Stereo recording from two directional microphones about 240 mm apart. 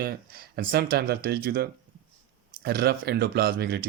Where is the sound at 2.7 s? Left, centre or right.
Right.